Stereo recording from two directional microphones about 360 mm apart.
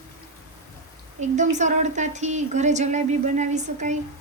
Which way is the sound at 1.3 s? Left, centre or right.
Centre.